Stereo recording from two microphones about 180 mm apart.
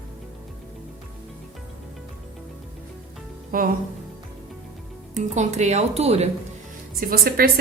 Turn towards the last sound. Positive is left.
turn(degrees=-55)  # may be behind; listen again after turning